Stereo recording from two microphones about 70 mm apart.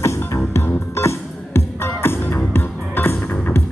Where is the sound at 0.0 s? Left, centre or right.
Left.